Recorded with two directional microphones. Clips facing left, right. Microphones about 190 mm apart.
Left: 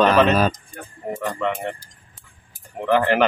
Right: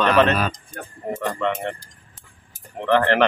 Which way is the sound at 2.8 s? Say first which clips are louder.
Even; 10° left (ahead or behind).